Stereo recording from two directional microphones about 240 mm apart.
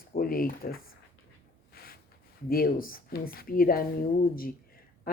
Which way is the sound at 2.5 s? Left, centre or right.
Left.